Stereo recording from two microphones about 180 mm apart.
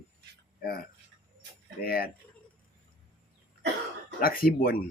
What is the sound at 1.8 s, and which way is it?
Speech, 55° left (ahead or behind).